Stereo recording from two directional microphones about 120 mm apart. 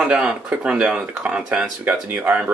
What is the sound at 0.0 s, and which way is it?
Speech, 5° right (ahead or behind).